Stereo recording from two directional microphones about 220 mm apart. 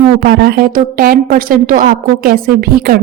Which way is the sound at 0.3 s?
45° right (ahead or behind).